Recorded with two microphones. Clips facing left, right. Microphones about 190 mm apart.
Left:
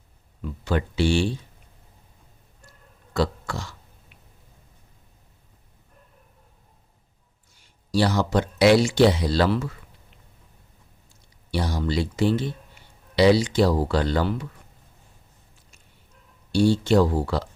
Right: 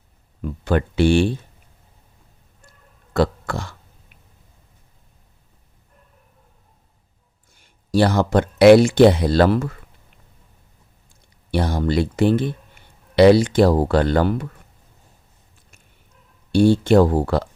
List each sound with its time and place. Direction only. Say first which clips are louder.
0.4 s speech: right 5 dB; 55° right (ahead or behind)
3.1 s burping: right 5 dB; 55° right (ahead or behind)
7.5 s speech: right 5 dB; 55° right (ahead or behind)
11.1 s speech: right 5 dB; 55° right (ahead or behind)
16.5 s speech: right 5 dB; 55° right (ahead or behind)